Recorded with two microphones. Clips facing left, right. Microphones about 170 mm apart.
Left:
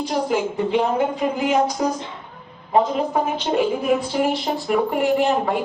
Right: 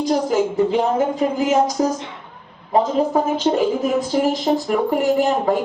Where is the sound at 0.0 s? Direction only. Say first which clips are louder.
Right 3 dB; 40° right (ahead or behind).